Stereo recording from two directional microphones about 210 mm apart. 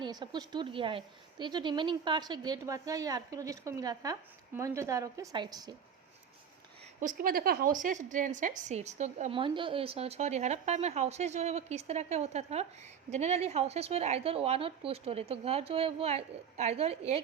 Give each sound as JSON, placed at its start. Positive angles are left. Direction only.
{"t": 0.0, "sound": "a woman's voice", "side_deg": -20}
{"t": 7.0, "sound": "a woman's voice", "side_deg": -40}